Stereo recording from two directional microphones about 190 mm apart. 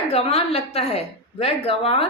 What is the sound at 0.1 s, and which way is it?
A woman's voice, 30° left (ahead or behind).